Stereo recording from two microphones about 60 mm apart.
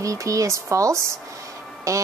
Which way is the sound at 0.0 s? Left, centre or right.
Right.